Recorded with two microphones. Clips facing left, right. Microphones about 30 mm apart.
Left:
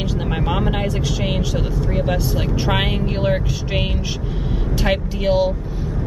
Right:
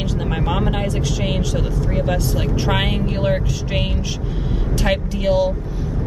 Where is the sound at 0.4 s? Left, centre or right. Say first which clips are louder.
Even; centre.